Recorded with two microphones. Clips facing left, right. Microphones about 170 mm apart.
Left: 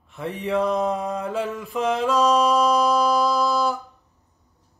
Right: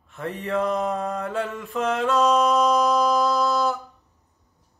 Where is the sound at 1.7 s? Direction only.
15° left (ahead or behind).